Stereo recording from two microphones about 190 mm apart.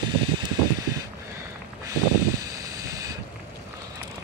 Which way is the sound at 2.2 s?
20° right (ahead or behind).